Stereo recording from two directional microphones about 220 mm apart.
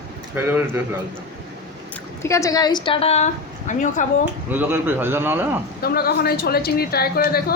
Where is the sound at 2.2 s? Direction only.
15° left (ahead or behind); by 4.1 s 35° left (ahead or behind).